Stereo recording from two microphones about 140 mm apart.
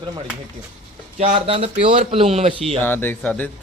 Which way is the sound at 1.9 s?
40° right (ahead or behind).